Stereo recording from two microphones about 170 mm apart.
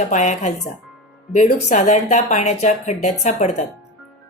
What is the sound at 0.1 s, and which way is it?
Speech, 45° left (ahead or behind).